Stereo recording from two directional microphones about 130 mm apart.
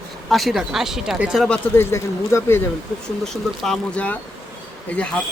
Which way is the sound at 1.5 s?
20° left (ahead or behind).